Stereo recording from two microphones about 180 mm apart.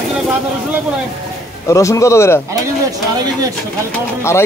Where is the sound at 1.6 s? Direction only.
15° left (ahead or behind).